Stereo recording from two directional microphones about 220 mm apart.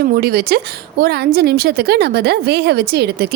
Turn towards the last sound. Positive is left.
turn(degrees=-45)  # may be behind; listen again after turning